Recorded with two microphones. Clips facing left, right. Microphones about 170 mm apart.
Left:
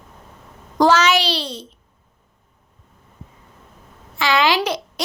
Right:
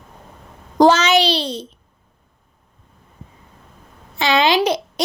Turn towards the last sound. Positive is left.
turn(degrees=-20)  # may be behind; listen again after turning